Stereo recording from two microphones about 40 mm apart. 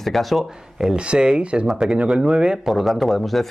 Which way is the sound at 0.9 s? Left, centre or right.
Right.